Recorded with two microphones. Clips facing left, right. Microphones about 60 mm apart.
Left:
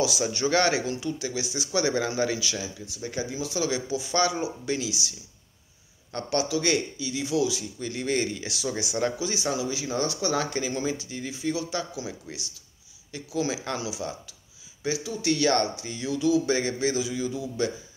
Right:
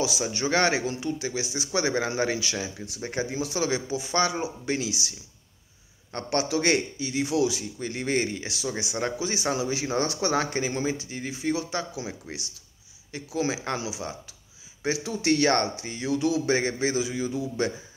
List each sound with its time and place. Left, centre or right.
0.3 s speech: right
6.1 s speech: right
9.2 s speech: right
14.8 s speech: right
15.4 s speech: right